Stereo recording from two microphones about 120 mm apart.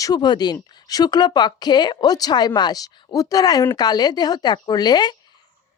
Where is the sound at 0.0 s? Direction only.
35° left (ahead or behind).